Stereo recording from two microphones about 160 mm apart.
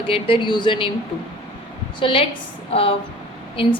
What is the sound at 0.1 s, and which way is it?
Speech, 30° left (ahead or behind).